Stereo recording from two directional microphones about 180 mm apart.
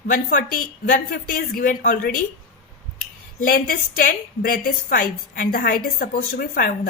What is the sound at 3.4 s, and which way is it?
A woman's voice, 50° left (ahead or behind).